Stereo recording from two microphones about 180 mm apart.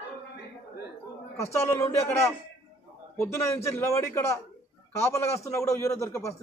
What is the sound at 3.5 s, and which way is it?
Speech, 15° left (ahead or behind).